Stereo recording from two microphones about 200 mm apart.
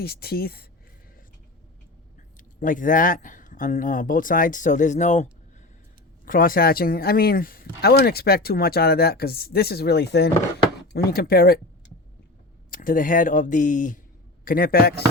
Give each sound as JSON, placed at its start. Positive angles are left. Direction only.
{"t": 0.0, "sound": "speech", "side_deg": 50}
{"t": 2.6, "sound": "speech", "side_deg": 40}
{"t": 12.7, "sound": "speech", "side_deg": 45}